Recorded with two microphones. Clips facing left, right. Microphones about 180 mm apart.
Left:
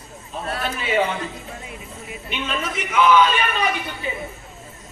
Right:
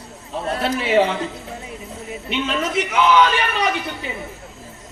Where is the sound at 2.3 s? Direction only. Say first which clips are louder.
Right 5 dB; 70° right (ahead or behind).